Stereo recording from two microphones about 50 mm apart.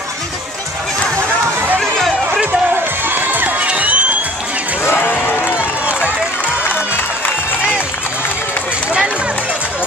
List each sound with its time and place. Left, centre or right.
1.8 s chatter: centre
3.1 s crowd: right
4.8 s a sound: left